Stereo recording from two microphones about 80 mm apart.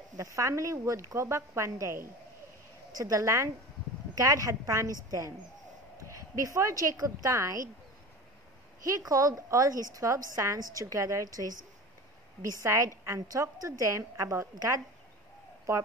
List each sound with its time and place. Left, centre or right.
0.4 s a woman's voice: right
2.9 s speech: right
8.8 s speech: right
12.6 s a woman's voice: right